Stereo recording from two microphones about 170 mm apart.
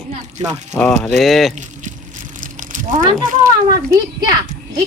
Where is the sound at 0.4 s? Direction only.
40° right (ahead or behind).